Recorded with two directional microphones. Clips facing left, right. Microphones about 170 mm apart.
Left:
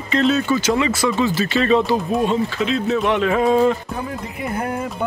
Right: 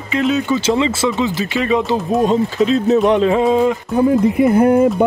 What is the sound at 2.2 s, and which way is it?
Speech, 40° right (ahead or behind).